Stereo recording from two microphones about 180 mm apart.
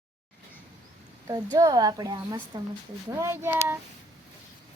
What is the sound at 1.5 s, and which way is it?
A woman's voice, 20° right (ahead or behind).